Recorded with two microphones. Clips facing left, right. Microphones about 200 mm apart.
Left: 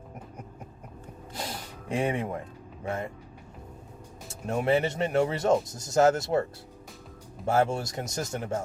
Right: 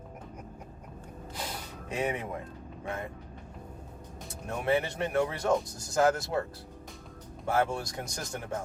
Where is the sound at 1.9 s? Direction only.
25° left (ahead or behind).